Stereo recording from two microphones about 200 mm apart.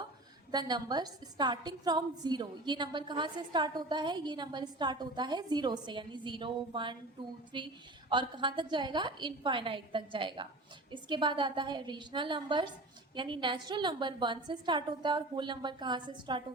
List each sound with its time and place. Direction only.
0.5 s a woman's voice: 20° right (ahead or behind)